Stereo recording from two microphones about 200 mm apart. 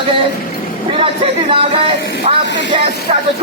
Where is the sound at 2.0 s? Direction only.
60° left (ahead or behind).